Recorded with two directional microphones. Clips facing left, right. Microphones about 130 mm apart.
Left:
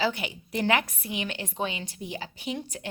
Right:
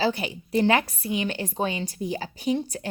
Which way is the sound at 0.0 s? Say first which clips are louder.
Right 3 dB; 35° right (ahead or behind).